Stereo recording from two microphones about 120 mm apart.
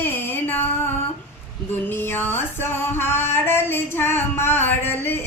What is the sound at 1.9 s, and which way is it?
Music, 20° left (ahead or behind).